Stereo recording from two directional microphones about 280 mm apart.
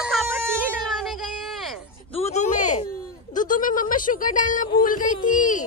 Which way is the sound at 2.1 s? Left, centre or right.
Left.